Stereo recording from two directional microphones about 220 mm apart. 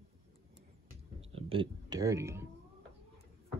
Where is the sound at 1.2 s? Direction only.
25° right (ahead or behind).